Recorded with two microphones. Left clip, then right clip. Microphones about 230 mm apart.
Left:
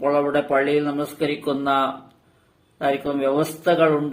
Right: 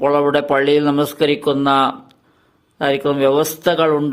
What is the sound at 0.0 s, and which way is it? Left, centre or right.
Speech, right.